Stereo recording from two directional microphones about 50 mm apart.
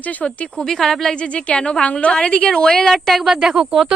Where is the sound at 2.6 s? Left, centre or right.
Centre.